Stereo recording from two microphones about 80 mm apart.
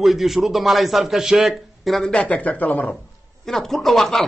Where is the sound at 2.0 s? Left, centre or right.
Centre.